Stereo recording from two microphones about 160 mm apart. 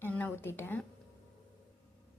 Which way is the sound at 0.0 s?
10° left (ahead or behind).